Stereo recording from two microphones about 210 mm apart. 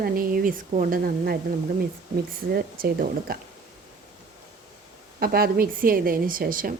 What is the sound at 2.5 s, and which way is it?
Speech, 45° right (ahead or behind).